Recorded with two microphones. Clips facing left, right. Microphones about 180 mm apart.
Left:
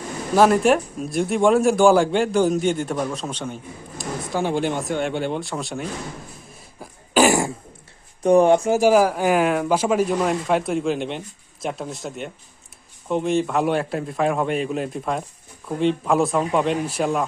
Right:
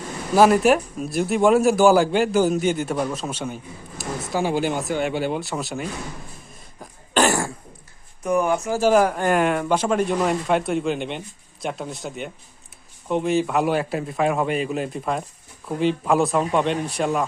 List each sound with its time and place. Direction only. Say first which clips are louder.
0.3 s a man's voice: even; 5° right (ahead or behind)
6.7 s cough: left 3 dB; 5° left (ahead or behind)
8.2 s speech: left 6 dB; 30° left (ahead or behind)
8.8 s a man's voice: left 1 dB; 5° left (ahead or behind)